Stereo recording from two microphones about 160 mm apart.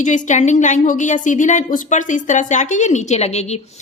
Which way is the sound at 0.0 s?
50° left (ahead or behind).